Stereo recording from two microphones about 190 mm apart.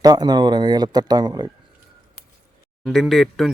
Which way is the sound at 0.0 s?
20° right (ahead or behind).